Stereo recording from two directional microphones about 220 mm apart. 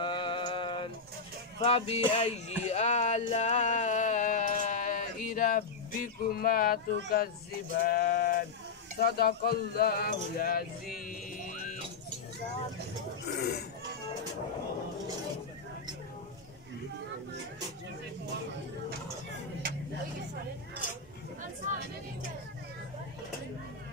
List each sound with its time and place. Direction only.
0.0 s mantra: 20° left (ahead or behind)
1.6 s speech: 25° left (ahead or behind)
13.4 s speech: 45° left (ahead or behind)